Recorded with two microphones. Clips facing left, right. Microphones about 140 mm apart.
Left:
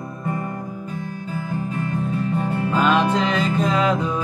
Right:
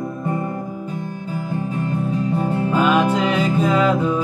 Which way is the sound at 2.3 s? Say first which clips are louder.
Right 2 dB; 30° right (ahead or behind).